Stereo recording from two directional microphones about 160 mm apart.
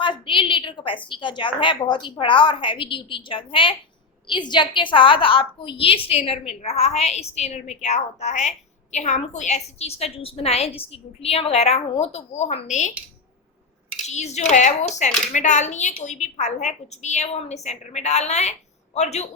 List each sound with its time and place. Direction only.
0.0 s a woman's voice: 30° left (ahead or behind); by 12.9 s 50° left (ahead or behind)
14.1 s a woman's voice: 45° left (ahead or behind)